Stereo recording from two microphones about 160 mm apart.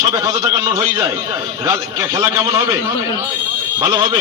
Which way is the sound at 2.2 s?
20° right (ahead or behind).